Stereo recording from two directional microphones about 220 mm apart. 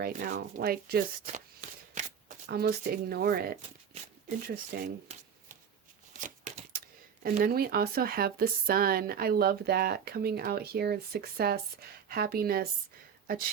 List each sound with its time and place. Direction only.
0.0 s speech: 40° right (ahead or behind)
2.0 s shuffling cards: 30° right (ahead or behind)
2.5 s speech: 45° right (ahead or behind)